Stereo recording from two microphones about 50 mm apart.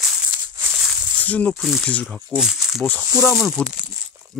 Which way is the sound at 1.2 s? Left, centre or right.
Left.